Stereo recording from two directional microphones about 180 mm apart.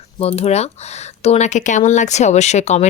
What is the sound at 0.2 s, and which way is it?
Speech, 35° left (ahead or behind).